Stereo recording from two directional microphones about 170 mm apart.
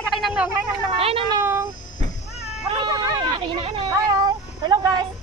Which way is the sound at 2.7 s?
25° right (ahead or behind).